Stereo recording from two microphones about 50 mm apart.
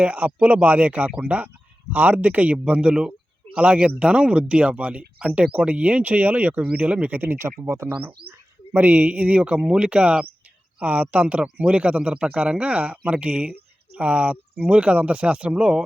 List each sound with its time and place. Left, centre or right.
0.0 s speech: right
7.2 s speech: right
8.7 s speech: right